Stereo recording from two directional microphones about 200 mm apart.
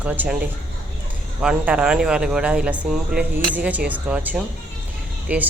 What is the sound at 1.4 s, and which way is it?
Speech, 5° right (ahead or behind).